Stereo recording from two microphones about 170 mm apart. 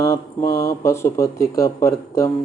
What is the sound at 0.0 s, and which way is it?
Mantra, 20° left (ahead or behind).